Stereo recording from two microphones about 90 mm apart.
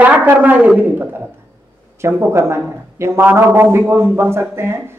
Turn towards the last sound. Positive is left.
turn(degrees=-30)  # may be behind; listen again after turning